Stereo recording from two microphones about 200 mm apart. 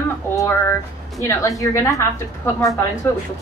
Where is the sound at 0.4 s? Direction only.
15° left (ahead or behind).